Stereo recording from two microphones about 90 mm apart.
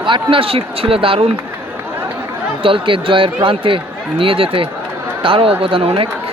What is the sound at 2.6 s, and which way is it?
A man's voice, 75° right (ahead or behind).